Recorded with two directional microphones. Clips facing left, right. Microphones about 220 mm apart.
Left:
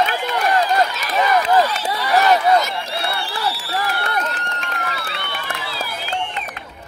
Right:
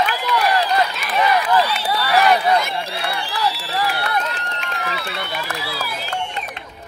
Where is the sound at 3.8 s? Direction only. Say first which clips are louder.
Right 2 dB; 50° left (ahead or behind).